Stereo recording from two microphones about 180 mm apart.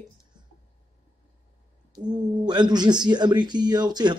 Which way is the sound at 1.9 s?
25° right (ahead or behind).